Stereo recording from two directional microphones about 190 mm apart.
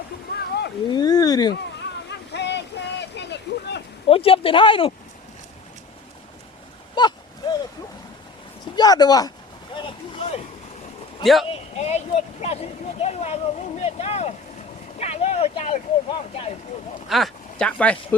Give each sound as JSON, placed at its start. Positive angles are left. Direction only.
{"t": 0.9, "sound": "a sound", "side_deg": 20}
{"t": 1.8, "sound": "a sound", "side_deg": 65}
{"t": 4.1, "sound": "speech", "side_deg": 30}
{"t": 6.9, "sound": "a sound", "side_deg": 20}
{"t": 8.7, "sound": "speech", "side_deg": 20}
{"t": 9.7, "sound": "boat", "side_deg": 30}
{"t": 11.2, "sound": "speech", "side_deg": 0}
{"t": 11.4, "sound": "speech", "side_deg": 35}
{"t": 17.1, "sound": "speech", "side_deg": 0}